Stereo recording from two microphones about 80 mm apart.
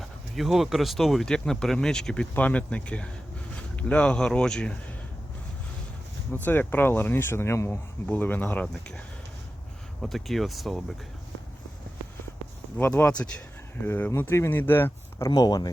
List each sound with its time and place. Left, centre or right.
0.3 s a man's voice: centre
6.3 s speech: left
8.0 s speech: left
8.6 s a man's voice: centre
10.0 s speech: centre
12.7 s a man's voice: left
13.8 s speech: left
15.4 s speech: left